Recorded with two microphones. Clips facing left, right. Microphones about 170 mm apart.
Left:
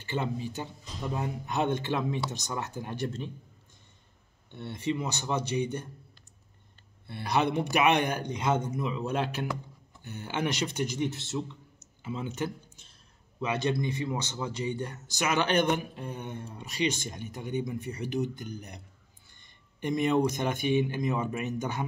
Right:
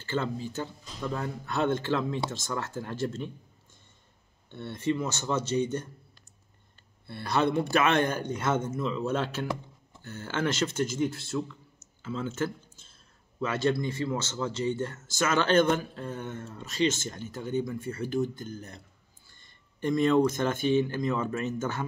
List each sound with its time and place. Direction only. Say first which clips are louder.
0.0 s speech: right 1 dB; 15° left (ahead or behind)
4.5 s speech: right 2 dB; 15° left (ahead or behind)
7.1 s a man's voice: right 1 dB; 15° left (ahead or behind)